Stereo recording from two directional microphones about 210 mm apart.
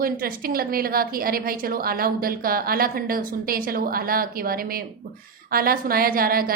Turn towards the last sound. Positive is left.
turn(degrees=-45)  # may be behind; listen again after turning